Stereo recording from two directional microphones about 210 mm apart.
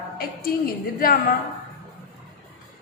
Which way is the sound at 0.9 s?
40° left (ahead or behind).